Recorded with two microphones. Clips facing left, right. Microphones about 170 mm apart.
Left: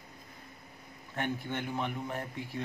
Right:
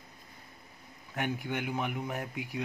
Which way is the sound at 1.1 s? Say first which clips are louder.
Right 1 dB; 15° right (ahead or behind).